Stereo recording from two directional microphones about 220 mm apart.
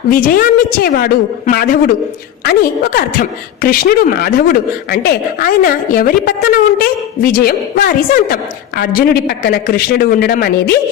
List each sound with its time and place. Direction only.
0.1 s a woman's voice: 40° left (ahead or behind)